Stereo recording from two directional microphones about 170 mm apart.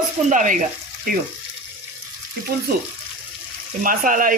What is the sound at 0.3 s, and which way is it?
Speech, 50° right (ahead or behind).